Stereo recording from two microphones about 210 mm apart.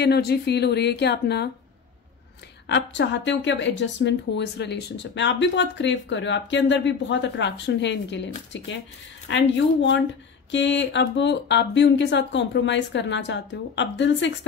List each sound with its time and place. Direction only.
0.0 s speech: 50° left (ahead or behind)
2.6 s speech: 55° left (ahead or behind)